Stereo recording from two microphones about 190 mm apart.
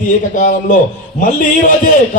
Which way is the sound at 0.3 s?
45° left (ahead or behind).